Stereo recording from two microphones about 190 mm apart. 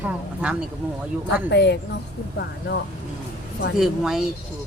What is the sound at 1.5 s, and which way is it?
Speech, 65° left (ahead or behind).